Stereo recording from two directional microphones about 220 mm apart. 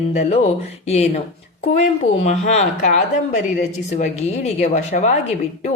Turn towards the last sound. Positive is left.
turn(degrees=30)  # may be behind; listen again after turning